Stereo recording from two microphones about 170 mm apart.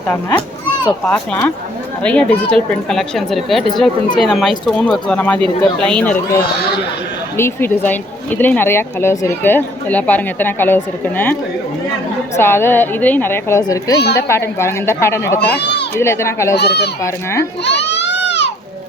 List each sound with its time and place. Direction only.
0.1 s speech: 10° left (ahead or behind)
7.3 s speech: 15° left (ahead or behind)
12.4 s speech: 15° left (ahead or behind)
15.4 s speech: 80° left
16.0 s speech: 15° left (ahead or behind)
16.6 s speech: 75° left (ahead or behind)
17.6 s a sound: 90° left